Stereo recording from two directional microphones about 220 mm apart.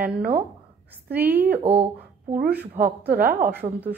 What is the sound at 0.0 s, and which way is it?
Speech, 40° right (ahead or behind).